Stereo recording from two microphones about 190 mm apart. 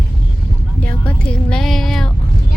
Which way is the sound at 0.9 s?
5° left (ahead or behind).